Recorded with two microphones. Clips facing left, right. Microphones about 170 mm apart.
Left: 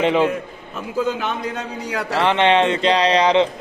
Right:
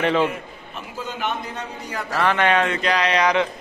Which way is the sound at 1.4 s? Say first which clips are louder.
Left 5 dB; 90° left.